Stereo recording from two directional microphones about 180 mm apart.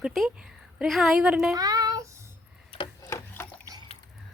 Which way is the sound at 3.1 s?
15° left (ahead or behind).